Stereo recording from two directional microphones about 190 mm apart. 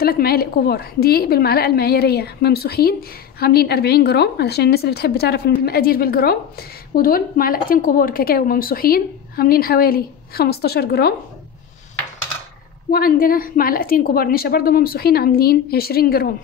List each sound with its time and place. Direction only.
0.0 s a woman's voice: 55° left (ahead or behind)
12.9 s a woman's voice: 50° left (ahead or behind)